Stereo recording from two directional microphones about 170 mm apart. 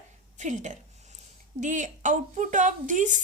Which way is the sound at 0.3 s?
45° right (ahead or behind).